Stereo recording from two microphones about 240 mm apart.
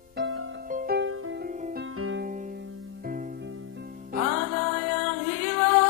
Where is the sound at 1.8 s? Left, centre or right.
Right.